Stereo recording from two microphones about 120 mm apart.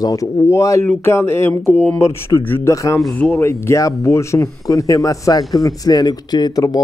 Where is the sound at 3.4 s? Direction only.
20° left (ahead or behind).